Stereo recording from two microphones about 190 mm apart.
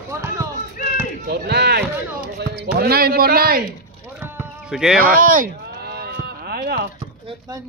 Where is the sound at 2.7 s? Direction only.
55° right (ahead or behind).